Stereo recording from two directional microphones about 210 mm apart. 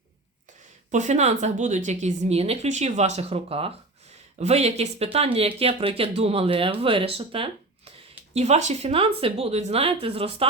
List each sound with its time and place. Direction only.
0.9 s a woman's voice: 35° right (ahead or behind)